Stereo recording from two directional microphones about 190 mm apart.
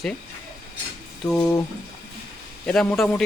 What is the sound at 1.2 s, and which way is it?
Speech, 20° left (ahead or behind).